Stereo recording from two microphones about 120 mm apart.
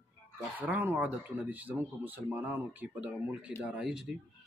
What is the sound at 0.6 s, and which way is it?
Speech, 15° right (ahead or behind).